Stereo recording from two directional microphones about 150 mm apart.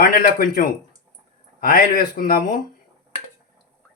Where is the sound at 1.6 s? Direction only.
75° left (ahead or behind).